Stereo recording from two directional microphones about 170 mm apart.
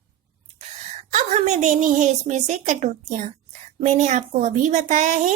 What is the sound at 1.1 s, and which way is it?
A woman's voice, 40° right (ahead or behind).